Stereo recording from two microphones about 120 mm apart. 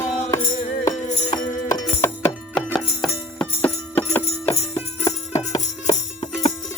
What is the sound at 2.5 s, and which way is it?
Music, 5° left (ahead or behind).